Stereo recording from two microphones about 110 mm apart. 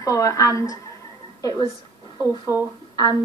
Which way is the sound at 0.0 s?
30° left (ahead or behind).